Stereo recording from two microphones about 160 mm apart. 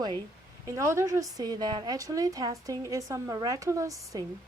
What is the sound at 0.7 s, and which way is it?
Speech, 15° right (ahead or behind).